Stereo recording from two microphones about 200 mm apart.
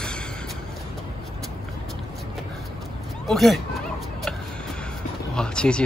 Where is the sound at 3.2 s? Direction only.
Centre (ahead or behind).